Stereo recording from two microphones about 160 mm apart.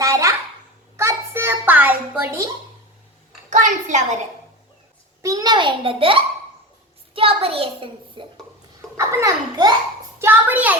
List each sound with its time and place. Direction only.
0.0 s a sound: 20° right (ahead or behind)
3.5 s a woman's voice: 50° right (ahead or behind)
5.2 s a child's voice: 25° right (ahead or behind)
10.2 s a child's voice: 10° right (ahead or behind)